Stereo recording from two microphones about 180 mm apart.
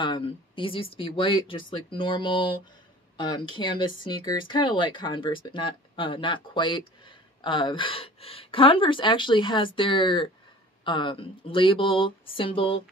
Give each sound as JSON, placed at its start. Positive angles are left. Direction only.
{"t": 0.0, "sound": "speech", "side_deg": 30}